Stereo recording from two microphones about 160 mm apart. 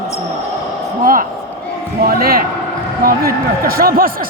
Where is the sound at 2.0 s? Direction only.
70° right (ahead or behind).